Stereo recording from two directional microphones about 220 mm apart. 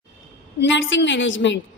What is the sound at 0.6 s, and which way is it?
Speech, 55° left (ahead or behind).